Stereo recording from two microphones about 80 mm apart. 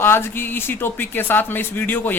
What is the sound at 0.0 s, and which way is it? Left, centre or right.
Speech, left.